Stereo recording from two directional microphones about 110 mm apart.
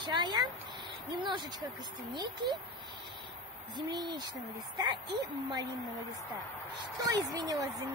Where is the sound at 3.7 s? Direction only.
40° right (ahead or behind).